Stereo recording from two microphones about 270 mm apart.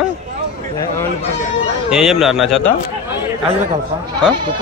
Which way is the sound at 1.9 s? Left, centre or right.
Centre.